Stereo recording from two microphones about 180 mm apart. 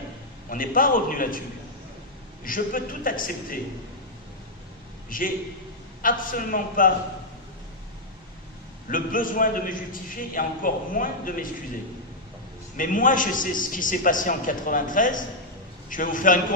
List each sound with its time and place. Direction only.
0.5 s a man's voice: 50° left (ahead or behind)
2.4 s a man's voice: 50° left (ahead or behind)
5.0 s a man's voice: 50° left (ahead or behind)
8.9 s a man's voice: 50° left (ahead or behind)
12.7 s a man's voice: 45° left (ahead or behind)